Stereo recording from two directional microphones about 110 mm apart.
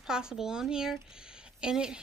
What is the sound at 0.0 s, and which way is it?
Speech, 5° right (ahead or behind).